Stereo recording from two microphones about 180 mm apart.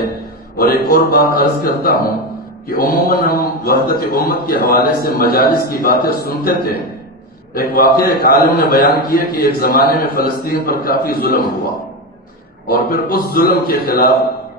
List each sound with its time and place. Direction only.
0.6 s a man's voice: 60° left (ahead or behind)
12.6 s a man's voice: 55° left (ahead or behind)